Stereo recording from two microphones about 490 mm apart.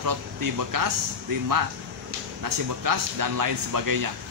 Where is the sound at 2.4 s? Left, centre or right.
Right.